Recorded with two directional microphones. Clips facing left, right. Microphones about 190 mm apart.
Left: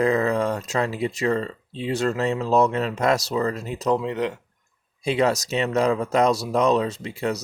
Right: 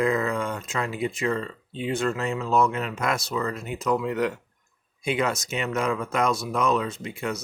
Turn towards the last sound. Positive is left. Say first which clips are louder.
# left 4 dB
turn(degrees=35)  # may be behind; listen again after turning